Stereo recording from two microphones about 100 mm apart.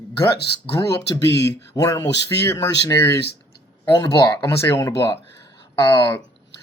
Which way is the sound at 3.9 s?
45° left (ahead or behind).